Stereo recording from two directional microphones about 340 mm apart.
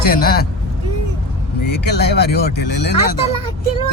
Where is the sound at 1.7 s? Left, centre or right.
Left.